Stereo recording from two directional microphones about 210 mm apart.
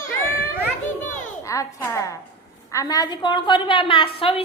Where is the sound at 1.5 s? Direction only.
15° left (ahead or behind).